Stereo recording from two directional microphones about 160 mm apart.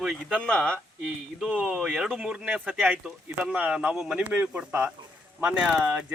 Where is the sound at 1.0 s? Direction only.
5° right (ahead or behind).